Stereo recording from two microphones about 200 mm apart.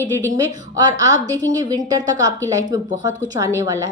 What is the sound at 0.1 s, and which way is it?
A woman's voice, 15° right (ahead or behind).